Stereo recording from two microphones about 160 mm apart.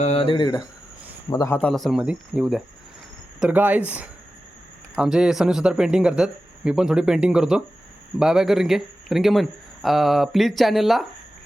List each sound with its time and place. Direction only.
0.0 s a man's voice: 40° left (ahead or behind); by 1.5 s 20° left (ahead or behind)
1.5 s speech: 5° left (ahead or behind)